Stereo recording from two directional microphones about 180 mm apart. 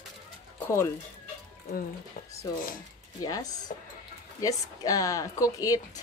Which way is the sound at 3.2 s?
20° left (ahead or behind).